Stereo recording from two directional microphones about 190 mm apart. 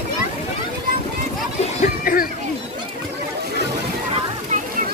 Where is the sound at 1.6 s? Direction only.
45° left (ahead or behind).